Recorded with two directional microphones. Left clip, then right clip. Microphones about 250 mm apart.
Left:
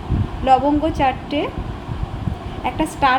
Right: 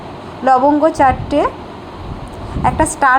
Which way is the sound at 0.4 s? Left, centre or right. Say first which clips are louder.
Right 5 dB; centre.